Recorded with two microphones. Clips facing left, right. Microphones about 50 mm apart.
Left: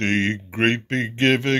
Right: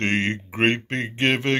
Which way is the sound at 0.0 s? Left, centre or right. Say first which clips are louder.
Left 1 dB; right.